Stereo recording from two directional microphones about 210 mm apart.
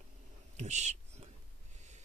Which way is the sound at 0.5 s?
35° right (ahead or behind).